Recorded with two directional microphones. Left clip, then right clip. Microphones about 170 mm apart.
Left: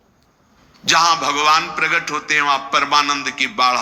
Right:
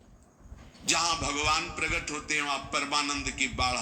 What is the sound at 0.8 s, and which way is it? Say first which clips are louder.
A man's voice: left 14 dB; 50° left (ahead or behind).